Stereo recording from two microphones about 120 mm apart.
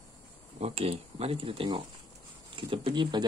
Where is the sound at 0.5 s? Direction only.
60° right (ahead or behind); by 3.2 s 45° right (ahead or behind).